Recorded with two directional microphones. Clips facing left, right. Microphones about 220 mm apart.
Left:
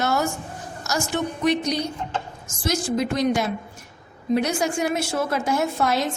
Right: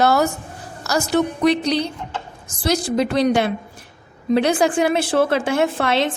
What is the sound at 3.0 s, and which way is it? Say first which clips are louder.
Speech: right 5 dB; 70° right (ahead or behind).